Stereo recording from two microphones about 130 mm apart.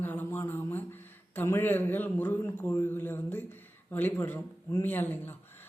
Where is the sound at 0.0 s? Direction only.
15° left (ahead or behind).